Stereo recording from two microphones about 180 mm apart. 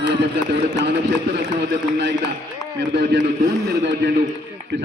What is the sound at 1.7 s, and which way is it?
A man's voice, 70° right (ahead or behind).